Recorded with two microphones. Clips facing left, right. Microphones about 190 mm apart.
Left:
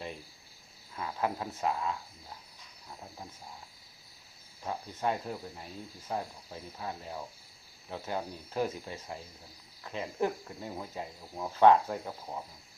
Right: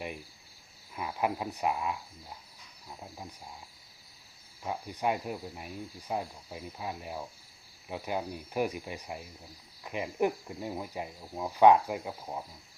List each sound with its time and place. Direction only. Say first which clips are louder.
0.9 s speech: right 2 dB; 15° right (ahead or behind)
3.0 s speech: right 2 dB; 10° right (ahead or behind)
4.6 s speech: right 1 dB; 15° right (ahead or behind)